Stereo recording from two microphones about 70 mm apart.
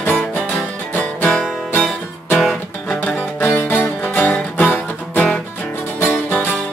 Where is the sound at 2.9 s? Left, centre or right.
Centre.